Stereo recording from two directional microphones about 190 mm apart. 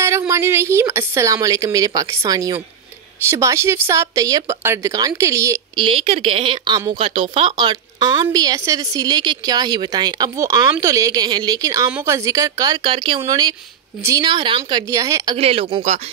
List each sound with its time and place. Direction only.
0.0 s a woman's voice: 15° right (ahead or behind)
5.9 s speech: 30° right (ahead or behind); by 15.3 s 15° right (ahead or behind)
15.3 s speech: 30° right (ahead or behind)